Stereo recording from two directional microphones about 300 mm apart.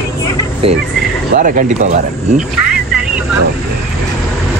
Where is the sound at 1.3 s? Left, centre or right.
Right.